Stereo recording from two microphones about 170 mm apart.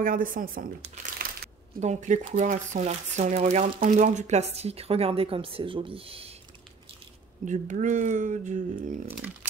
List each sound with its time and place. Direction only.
0.0 s speech: 55° right (ahead or behind)
1.2 s crumpling: 55° right (ahead or behind)
1.8 s speech: 45° right (ahead or behind)
7.4 s speech: 45° right (ahead or behind)